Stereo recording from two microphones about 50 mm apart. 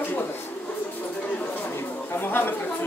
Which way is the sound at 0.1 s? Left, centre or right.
Left.